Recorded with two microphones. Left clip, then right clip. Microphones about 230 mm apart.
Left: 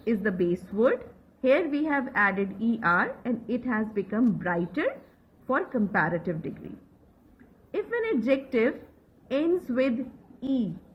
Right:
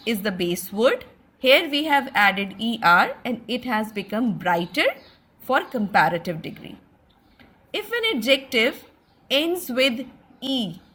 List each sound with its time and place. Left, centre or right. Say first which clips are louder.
0.0 s a woman's voice: right 2 dB; right
7.7 s a woman's voice: right 4 dB; right